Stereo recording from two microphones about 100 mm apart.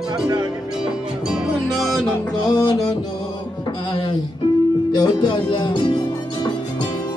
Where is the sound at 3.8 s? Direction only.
55° left (ahead or behind).